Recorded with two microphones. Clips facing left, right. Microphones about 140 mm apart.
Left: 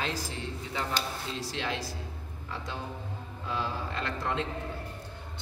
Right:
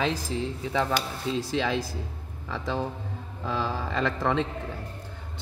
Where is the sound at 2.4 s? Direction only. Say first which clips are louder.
Right 8 dB; 90° right.